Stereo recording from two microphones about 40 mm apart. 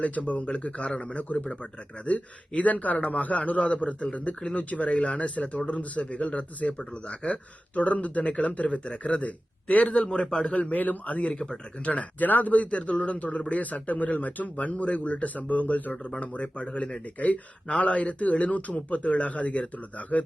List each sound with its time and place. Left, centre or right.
0.0 s speech: left
1.1 s speech: left